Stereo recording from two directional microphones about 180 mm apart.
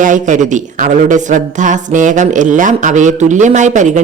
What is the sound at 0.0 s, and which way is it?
Speech, 45° right (ahead or behind).